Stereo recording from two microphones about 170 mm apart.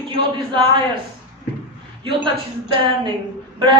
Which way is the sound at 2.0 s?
30° right (ahead or behind).